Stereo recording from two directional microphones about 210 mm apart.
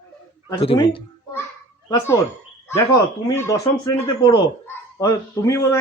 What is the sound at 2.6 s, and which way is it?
Speech, 15° left (ahead or behind).